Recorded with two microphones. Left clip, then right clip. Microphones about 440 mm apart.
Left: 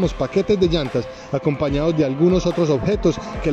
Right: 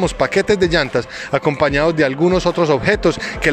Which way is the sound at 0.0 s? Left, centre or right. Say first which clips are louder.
Right 4 dB; right.